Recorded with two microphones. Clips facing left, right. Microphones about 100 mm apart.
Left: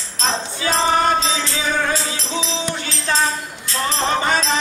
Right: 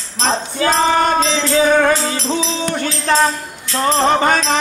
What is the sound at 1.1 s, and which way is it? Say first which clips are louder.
Speech: right 7 dB; 50° right (ahead or behind).